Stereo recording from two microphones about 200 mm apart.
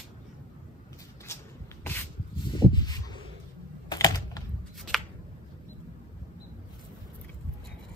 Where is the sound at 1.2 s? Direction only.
10° left (ahead or behind).